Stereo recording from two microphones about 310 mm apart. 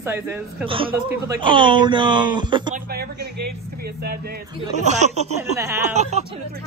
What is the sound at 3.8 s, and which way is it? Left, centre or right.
Speech, right.